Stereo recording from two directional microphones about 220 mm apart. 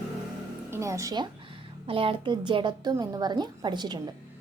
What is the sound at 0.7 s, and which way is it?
A woman's voice, 15° right (ahead or behind).